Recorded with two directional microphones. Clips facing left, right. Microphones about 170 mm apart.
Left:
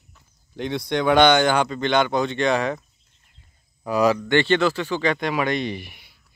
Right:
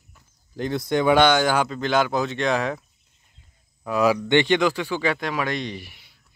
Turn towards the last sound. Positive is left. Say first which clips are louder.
# left 3 dB
turn(degrees=0)  # may be behind; listen again after turning